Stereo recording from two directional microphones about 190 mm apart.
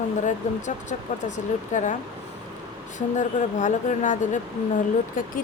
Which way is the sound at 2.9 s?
40° left (ahead or behind).